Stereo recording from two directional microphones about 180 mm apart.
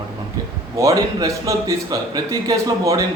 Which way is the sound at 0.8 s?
20° right (ahead or behind).